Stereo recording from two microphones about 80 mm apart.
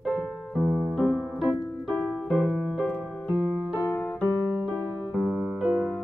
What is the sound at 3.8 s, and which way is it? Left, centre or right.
Keyboard, left.